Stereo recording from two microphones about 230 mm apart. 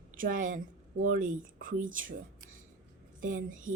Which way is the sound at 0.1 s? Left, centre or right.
Right.